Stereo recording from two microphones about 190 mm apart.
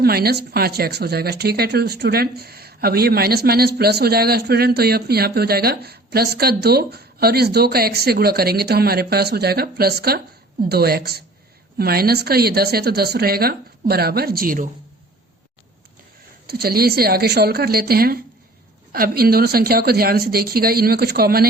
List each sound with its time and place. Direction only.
0.0 s a woman's voice: 55° right (ahead or behind)
16.5 s a woman's voice: 55° right (ahead or behind)